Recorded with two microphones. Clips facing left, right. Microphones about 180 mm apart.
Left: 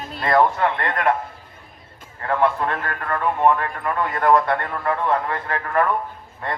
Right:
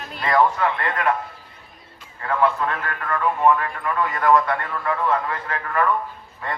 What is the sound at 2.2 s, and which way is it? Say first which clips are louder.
A man's voice: left 1 dB; 35° left (ahead or behind).